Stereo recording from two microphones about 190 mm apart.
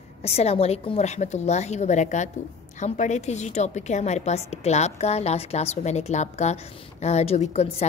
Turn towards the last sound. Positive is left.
turn(degrees=35)  # may be behind; listen again after turning